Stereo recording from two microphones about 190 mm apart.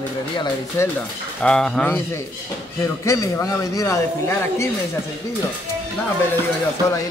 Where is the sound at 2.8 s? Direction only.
15° left (ahead or behind).